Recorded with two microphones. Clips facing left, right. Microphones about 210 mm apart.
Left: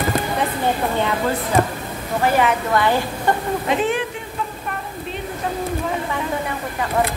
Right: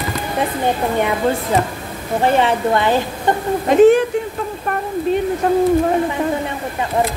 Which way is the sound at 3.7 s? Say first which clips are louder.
Right 12 dB; 40° right (ahead or behind).